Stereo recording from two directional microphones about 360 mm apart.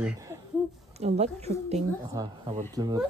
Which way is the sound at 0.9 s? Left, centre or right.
Centre.